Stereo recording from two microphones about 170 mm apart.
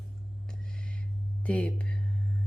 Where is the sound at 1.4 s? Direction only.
5° left (ahead or behind).